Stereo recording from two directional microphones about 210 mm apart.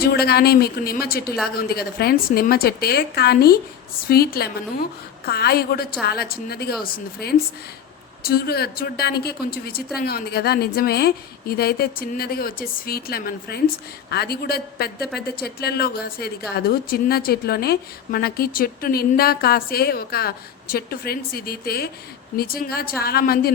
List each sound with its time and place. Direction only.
0.0 s a woman's voice: 50° left (ahead or behind)